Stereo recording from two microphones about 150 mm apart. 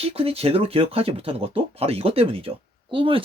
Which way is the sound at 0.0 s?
40° right (ahead or behind).